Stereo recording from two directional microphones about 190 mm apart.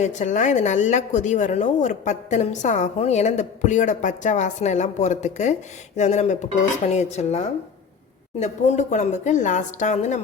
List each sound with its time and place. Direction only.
0.0 s a woman's voice: 40° left (ahead or behind)